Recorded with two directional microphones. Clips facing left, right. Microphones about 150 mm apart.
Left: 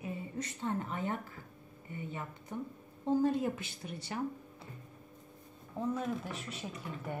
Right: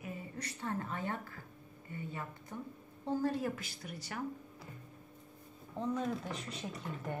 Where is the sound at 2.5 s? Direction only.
20° left (ahead or behind).